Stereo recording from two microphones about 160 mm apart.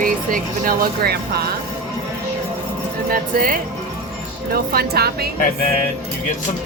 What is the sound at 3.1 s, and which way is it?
Speech, 60° right (ahead or behind).